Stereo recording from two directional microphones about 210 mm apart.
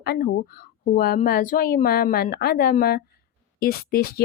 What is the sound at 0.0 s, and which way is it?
Speech, 45° left (ahead or behind).